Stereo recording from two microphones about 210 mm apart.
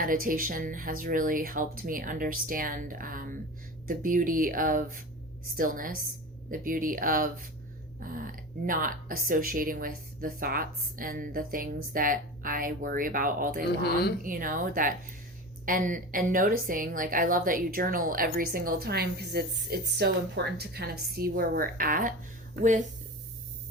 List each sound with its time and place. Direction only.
0.0 s a woman's voice: 40° right (ahead or behind)